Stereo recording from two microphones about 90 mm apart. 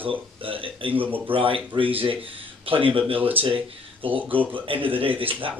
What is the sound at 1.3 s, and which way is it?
A man's voice, 85° right.